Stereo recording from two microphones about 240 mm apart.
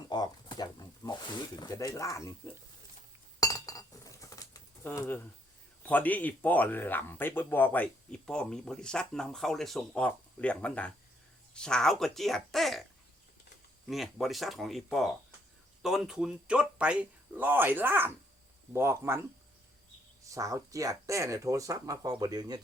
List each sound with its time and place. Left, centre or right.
0.1 s speech: centre
3.4 s chink: centre
5.8 s speech: centre
13.8 s speech: centre
20.3 s speech: centre